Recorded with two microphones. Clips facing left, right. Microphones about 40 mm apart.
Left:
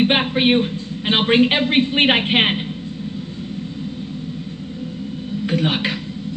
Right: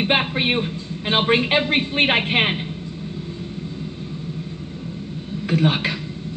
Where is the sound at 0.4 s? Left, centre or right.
Left.